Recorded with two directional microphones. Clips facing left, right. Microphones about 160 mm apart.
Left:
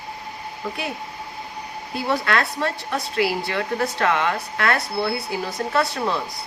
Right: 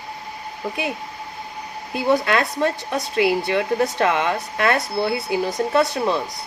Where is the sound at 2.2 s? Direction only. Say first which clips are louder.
Right 3 dB; 20° right (ahead or behind).